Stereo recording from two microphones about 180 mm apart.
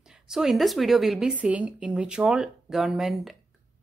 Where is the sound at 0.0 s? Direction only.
5° right (ahead or behind).